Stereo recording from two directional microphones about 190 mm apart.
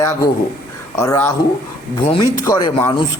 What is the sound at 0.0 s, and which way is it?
A man's voice, 15° left (ahead or behind).